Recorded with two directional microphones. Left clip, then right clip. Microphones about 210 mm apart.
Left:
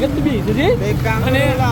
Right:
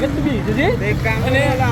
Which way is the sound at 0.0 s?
15° left (ahead or behind).